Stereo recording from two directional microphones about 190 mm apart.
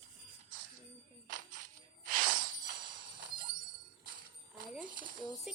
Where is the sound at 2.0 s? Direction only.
45° right (ahead or behind).